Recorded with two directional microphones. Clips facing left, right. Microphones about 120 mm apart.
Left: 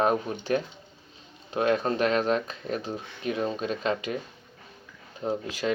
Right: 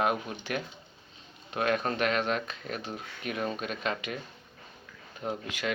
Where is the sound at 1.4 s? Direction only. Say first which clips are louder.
Left 4 dB; 30° left (ahead or behind).